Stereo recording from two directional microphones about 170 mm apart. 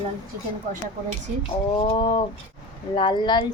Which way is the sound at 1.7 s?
30° left (ahead or behind).